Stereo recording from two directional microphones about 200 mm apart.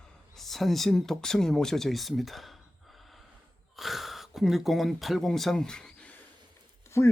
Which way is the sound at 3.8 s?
Centre (ahead or behind).